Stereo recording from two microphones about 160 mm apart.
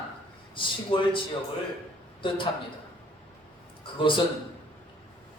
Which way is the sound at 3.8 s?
30° left (ahead or behind).